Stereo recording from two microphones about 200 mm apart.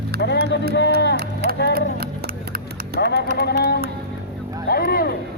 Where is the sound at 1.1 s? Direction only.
55° right (ahead or behind).